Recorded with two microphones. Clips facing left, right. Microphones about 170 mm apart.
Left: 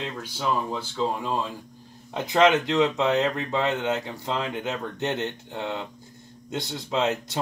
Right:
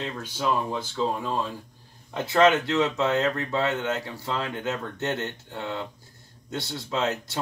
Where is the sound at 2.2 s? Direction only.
15° left (ahead or behind).